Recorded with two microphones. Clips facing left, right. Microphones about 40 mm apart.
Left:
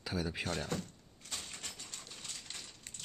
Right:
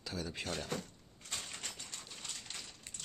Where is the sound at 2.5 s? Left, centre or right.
Centre.